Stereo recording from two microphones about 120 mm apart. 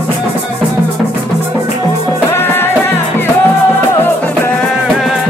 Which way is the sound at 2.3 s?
20° left (ahead or behind).